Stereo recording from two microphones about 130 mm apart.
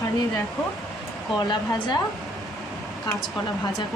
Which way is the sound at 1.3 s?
35° left (ahead or behind).